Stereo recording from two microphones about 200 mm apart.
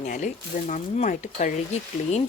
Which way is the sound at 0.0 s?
35° left (ahead or behind).